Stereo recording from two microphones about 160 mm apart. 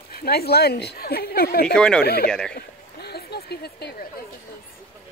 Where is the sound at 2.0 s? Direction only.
75° left (ahead or behind).